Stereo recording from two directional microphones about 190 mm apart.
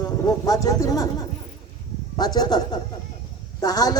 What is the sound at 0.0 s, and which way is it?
Speech, 20° left (ahead or behind).